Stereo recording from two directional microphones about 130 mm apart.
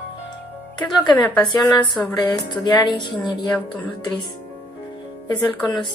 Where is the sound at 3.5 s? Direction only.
10° left (ahead or behind).